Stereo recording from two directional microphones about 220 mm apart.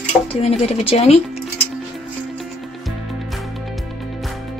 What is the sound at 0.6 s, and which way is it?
Speech, 25° left (ahead or behind).